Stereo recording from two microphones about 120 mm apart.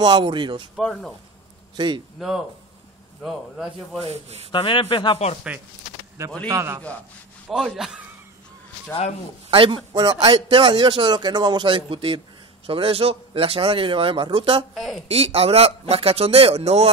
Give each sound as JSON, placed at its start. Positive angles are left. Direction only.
{"t": 0.0, "sound": "a man's voice", "side_deg": -40}
{"t": 0.7, "sound": "a man's voice", "side_deg": 0}
{"t": 2.1, "sound": "a man's voice", "side_deg": -5}
{"t": 4.0, "sound": "a man's voice", "side_deg": -60}
{"t": 4.5, "sound": "speech", "side_deg": 45}
{"t": 6.5, "sound": "a man's voice", "side_deg": -20}
{"t": 7.5, "sound": "a man's voice", "side_deg": 0}
{"t": 9.5, "sound": "speech", "side_deg": -45}
{"t": 9.9, "sound": "a man's voice", "side_deg": -35}
{"t": 14.7, "sound": "a man's voice", "side_deg": 0}
{"t": 15.0, "sound": "a man's voice", "side_deg": -55}